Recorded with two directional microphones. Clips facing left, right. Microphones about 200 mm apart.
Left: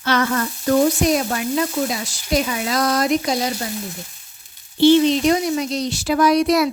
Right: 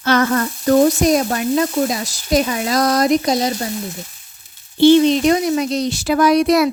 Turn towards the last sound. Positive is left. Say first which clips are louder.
# right 2 dB
turn(degrees=-60)  # may be behind; listen again after turning